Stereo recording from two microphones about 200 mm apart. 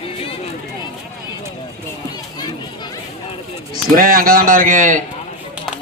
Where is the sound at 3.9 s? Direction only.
45° right (ahead or behind).